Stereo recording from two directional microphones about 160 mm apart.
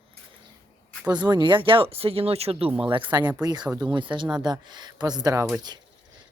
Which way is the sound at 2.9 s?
30° right (ahead or behind).